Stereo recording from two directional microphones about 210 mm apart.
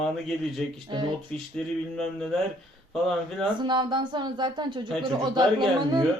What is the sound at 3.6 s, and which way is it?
Speech, 20° right (ahead or behind).